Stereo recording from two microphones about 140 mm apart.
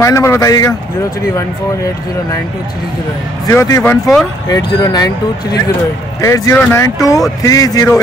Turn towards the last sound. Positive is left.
turn(degrees=25)  # may be behind; listen again after turning